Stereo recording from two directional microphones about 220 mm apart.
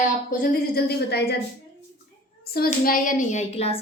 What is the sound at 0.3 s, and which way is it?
A woman's voice, 40° left (ahead or behind).